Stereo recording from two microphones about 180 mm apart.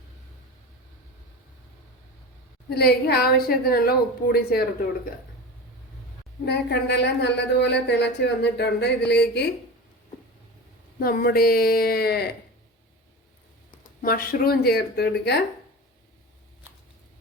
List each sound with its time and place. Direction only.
2.6 s a woman's voice: 60° left (ahead or behind)
6.4 s a woman's voice: 70° left (ahead or behind)
11.0 s a woman's voice: 55° left (ahead or behind)
14.0 s a woman's voice: 55° left (ahead or behind)